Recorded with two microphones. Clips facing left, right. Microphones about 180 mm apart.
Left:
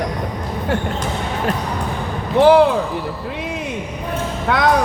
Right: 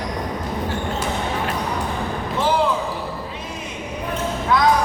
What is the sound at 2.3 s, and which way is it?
Speech, 65° left (ahead or behind).